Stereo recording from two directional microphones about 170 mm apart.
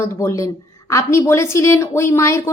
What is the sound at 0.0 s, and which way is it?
A woman's voice, 15° left (ahead or behind).